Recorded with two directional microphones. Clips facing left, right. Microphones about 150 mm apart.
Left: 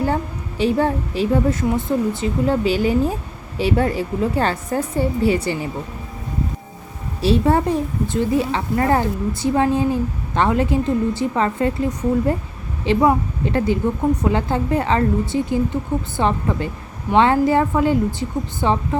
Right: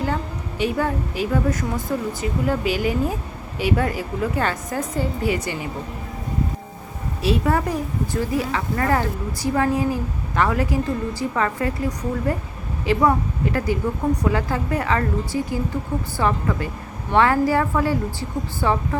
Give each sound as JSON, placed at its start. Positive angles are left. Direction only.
{"t": 0.6, "sound": "a woman's voice", "side_deg": 30}
{"t": 7.2, "sound": "a woman's voice", "side_deg": 30}